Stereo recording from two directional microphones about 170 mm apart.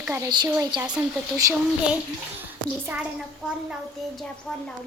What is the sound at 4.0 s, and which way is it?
Speech, centre (ahead or behind).